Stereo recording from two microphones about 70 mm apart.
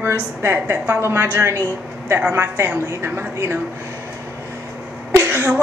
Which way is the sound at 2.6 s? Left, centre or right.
Right.